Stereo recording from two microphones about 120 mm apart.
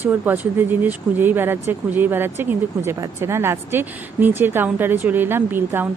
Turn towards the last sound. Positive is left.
turn(degrees=-15)  # may be behind; listen again after turning